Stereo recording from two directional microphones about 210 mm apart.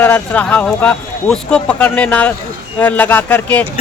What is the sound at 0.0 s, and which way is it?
Speech, 10° left (ahead or behind).